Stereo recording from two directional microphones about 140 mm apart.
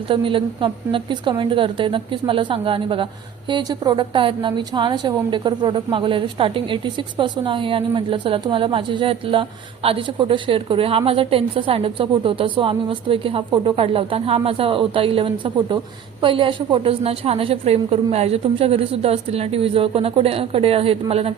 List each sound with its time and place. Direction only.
0.1 s a woman's voice: 40° right (ahead or behind)